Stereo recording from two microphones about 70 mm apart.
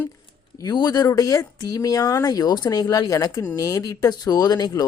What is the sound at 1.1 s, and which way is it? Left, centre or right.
Speech, left.